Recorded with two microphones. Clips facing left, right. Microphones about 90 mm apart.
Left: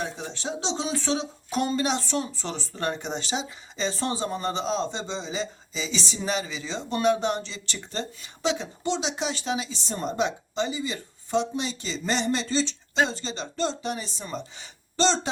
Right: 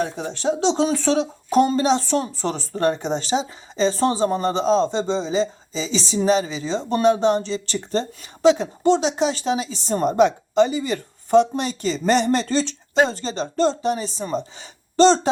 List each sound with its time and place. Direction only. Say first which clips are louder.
0.0 s a woman's voice: right 9 dB; 45° right (ahead or behind)
1.5 s a woman's voice: right 8 dB; 35° right (ahead or behind)